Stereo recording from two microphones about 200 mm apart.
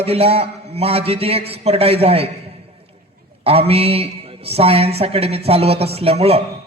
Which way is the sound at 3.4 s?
30° right (ahead or behind).